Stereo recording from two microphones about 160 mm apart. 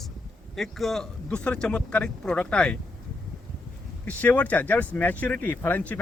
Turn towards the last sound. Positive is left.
turn(degrees=10)  # may be behind; listen again after turning